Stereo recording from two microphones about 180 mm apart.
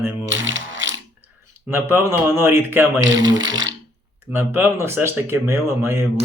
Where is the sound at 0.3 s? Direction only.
90° right.